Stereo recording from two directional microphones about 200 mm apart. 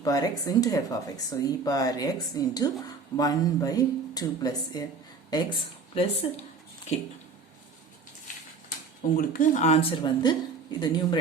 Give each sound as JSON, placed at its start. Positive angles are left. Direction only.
{"t": 0.0, "sound": "speech", "side_deg": 20}
{"t": 9.1, "sound": "speech", "side_deg": 40}